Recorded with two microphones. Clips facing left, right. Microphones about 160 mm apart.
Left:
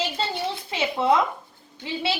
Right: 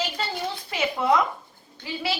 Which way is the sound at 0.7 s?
25° left (ahead or behind).